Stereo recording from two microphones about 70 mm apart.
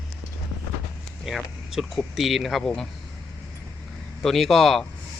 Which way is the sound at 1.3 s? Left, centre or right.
Centre.